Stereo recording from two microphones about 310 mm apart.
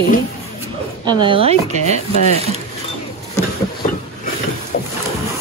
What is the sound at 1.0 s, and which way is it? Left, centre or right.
Speech, centre.